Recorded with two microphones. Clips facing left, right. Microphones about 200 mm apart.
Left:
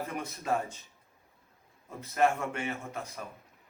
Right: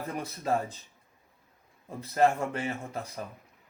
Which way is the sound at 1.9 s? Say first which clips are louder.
Right 2 dB; 30° right (ahead or behind).